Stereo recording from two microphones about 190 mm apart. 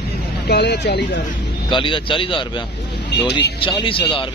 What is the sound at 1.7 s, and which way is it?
Speech, 25° left (ahead or behind).